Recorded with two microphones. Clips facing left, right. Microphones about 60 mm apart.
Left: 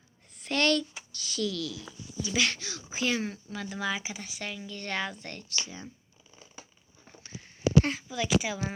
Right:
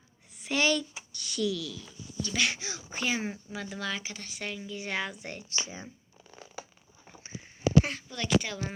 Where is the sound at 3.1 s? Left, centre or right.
Centre.